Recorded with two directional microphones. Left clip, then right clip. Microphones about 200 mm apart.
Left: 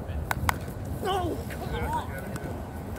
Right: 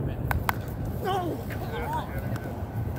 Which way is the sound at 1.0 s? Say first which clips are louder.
Even; 10° right (ahead or behind).